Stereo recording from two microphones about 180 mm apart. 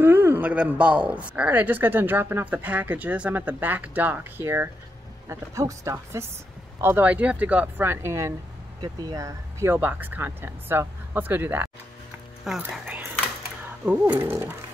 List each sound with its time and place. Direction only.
0.0 s speech: 10° right (ahead or behind)